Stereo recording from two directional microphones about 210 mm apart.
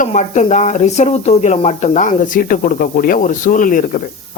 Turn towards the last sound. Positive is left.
turn(degrees=40)  # may be behind; listen again after turning